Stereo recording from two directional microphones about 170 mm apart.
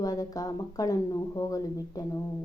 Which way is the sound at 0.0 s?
20° left (ahead or behind).